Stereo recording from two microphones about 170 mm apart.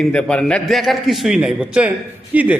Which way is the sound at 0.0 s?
5° left (ahead or behind).